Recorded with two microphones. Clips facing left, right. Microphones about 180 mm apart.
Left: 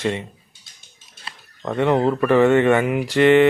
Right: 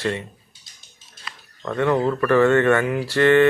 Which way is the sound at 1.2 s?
25° left (ahead or behind).